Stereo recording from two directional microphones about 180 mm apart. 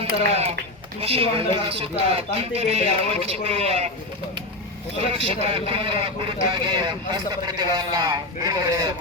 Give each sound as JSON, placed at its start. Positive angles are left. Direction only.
{"t": 0.0, "sound": "speech", "side_deg": -35}
{"t": 4.9, "sound": "speech", "side_deg": -30}